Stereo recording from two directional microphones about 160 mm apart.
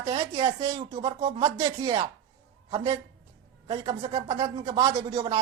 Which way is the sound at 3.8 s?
40° right (ahead or behind).